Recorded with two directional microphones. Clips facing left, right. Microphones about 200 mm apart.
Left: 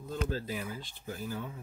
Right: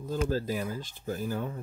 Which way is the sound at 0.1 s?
40° right (ahead or behind).